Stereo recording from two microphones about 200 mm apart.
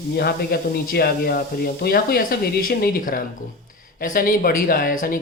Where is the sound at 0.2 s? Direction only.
50° left (ahead or behind).